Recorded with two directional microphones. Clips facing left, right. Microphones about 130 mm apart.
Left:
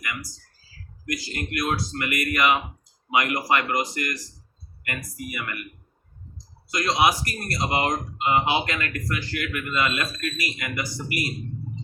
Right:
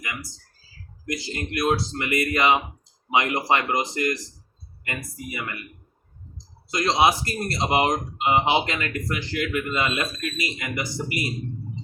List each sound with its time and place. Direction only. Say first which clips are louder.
0.0 s a sound: left 1 dB; 25° right (ahead or behind)
1.0 s speech: right 1 dB; 25° right (ahead or behind)
6.7 s speech: right 2 dB; 25° right (ahead or behind)